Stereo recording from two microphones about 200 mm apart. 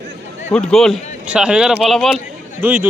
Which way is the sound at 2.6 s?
10° right (ahead or behind).